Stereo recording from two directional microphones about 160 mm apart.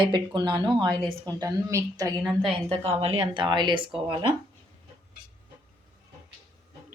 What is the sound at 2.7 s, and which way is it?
Speech, 40° right (ahead or behind).